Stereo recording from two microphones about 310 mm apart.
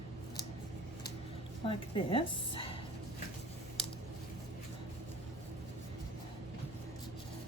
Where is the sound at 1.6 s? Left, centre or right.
Centre.